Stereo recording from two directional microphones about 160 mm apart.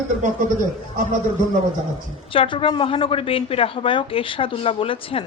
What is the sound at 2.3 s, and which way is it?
A woman's voice, 35° left (ahead or behind).